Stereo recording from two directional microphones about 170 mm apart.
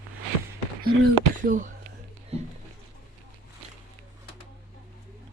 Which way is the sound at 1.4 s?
50° right (ahead or behind).